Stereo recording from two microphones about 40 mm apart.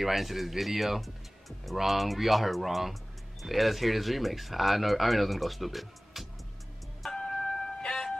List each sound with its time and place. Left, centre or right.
0.0 s speech: centre
7.2 s music: centre